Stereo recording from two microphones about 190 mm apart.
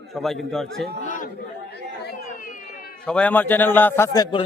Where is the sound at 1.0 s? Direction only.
40° left (ahead or behind).